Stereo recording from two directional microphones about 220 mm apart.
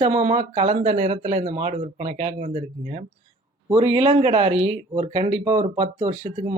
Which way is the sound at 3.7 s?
20° right (ahead or behind).